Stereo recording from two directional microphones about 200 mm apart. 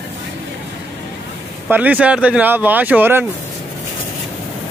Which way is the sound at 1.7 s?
10° right (ahead or behind).